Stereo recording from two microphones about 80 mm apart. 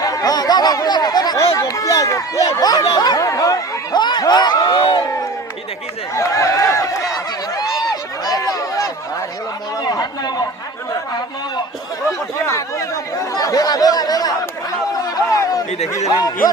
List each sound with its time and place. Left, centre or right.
0.0 s chatter: left
1.5 s speech: left
3.9 s snicker: left
4.5 s crowd: left
4.8 s crowd: left
6.1 s a sound: left
9.8 s a sound: left
10.9 s chatter: left
12.5 s chatter: left
13.3 s chatter: left
15.1 s speech: left